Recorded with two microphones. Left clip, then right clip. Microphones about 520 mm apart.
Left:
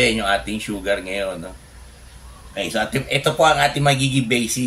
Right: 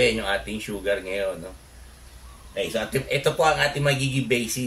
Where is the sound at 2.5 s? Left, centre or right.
Right.